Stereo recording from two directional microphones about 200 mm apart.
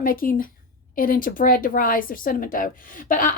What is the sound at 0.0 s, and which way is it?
A woman's voice, 45° left (ahead or behind).